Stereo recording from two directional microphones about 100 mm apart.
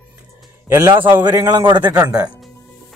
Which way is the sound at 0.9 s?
50° right (ahead or behind).